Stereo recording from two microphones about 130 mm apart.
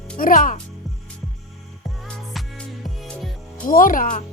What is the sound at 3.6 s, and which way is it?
Music, 90° left.